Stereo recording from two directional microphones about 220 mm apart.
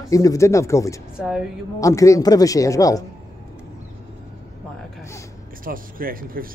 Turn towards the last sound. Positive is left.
turn(degrees=-40)  # may be behind; listen again after turning